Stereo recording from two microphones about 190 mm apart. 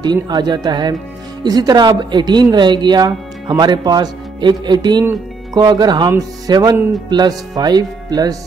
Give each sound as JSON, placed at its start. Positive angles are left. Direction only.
{"t": 0.0, "sound": "speech", "side_deg": -20}